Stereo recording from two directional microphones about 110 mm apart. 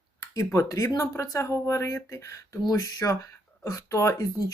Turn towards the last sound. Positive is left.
turn(degrees=30)  # may be behind; listen again after turning